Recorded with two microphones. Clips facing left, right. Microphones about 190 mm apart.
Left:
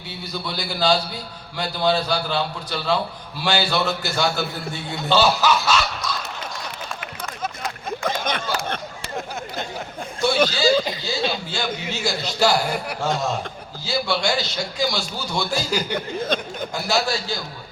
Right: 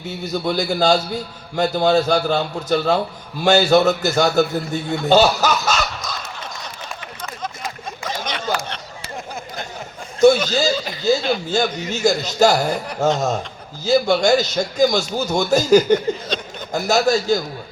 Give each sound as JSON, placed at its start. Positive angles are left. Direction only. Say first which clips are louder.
{"t": 0.0, "sound": "a man's voice", "louder": "right 8 dB", "side_deg": -45}
{"t": 6.0, "sound": "a sound", "louder": "left 2 dB", "side_deg": -45}
{"t": 8.0, "sound": "a sound", "louder": "even", "side_deg": 55}
{"t": 10.2, "sound": "a man's voice", "louder": "right 7 dB", "side_deg": -45}
{"t": 16.0, "sound": "speech", "louder": "right 1 dB", "side_deg": 55}
{"t": 16.7, "sound": "a man's voice", "louder": "right 7 dB", "side_deg": -45}